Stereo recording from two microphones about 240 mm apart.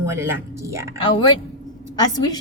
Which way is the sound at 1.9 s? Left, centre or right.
Centre.